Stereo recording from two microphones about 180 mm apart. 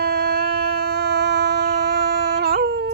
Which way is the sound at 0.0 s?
60° right (ahead or behind).